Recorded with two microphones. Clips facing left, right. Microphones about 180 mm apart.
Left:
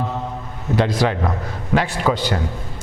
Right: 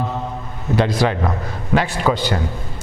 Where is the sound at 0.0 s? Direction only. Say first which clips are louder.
Right 1 dB; 30° right (ahead or behind).